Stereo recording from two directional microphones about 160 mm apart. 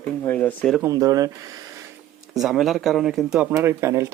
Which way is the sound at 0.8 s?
20° right (ahead or behind).